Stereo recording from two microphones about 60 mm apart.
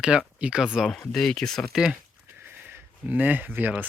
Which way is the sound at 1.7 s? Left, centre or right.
Centre.